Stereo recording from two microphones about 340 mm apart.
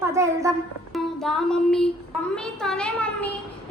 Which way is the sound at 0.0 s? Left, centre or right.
Centre.